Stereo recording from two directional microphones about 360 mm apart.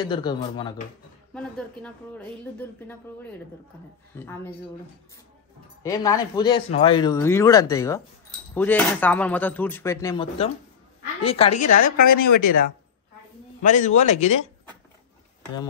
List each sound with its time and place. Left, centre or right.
0.0 s speech: centre
4.2 s speech: centre
5.8 s a man's voice: centre
12.0 s speech: left
13.6 s a man's voice: left